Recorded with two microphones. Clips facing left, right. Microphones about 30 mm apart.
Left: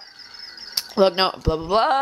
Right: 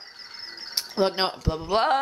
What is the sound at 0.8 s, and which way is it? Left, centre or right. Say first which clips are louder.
Speech: left 6 dB; left.